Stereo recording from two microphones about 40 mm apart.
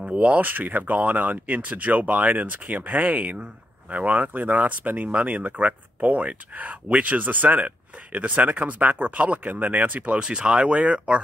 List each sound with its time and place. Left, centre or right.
0.2 s speech: right
10.1 s speech: right